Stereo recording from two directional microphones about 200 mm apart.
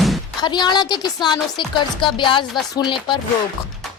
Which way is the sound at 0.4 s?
20° left (ahead or behind).